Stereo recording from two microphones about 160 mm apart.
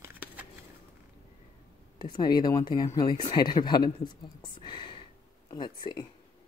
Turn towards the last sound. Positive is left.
turn(degrees=30)  # may be behind; listen again after turning